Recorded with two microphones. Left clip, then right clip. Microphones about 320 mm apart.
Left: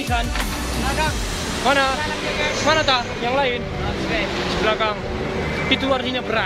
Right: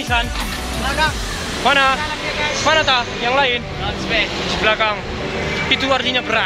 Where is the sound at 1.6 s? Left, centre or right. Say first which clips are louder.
Right 4 dB; centre.